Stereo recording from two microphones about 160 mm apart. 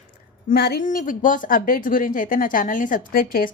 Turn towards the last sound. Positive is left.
turn(degrees=65)  # may be behind; listen again after turning